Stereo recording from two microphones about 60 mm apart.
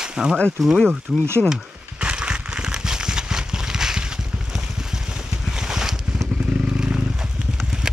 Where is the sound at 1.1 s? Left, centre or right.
Centre.